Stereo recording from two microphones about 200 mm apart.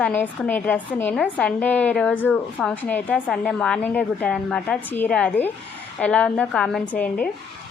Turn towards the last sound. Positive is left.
turn(degrees=5)  # may be behind; listen again after turning